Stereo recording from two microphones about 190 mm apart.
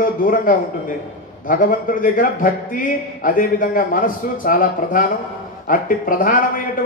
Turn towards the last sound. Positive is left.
turn(degrees=45)  # may be behind; listen again after turning